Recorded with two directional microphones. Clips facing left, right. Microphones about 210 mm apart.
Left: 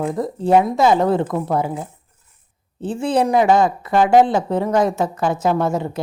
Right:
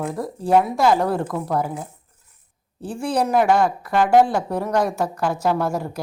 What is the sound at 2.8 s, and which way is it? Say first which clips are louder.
A woman's voice: left 4 dB; 20° left (ahead or behind).